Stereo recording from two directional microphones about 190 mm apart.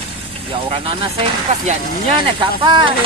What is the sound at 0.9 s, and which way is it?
Speech, 30° right (ahead or behind).